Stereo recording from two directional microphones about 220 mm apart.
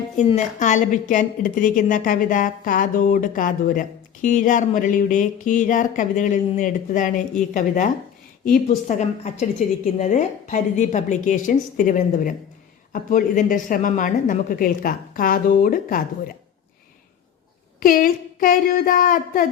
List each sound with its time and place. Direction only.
0.2 s a woman's voice: 30° left (ahead or behind)
8.4 s a woman's voice: 35° left (ahead or behind)
17.7 s a woman's voice: 40° left (ahead or behind)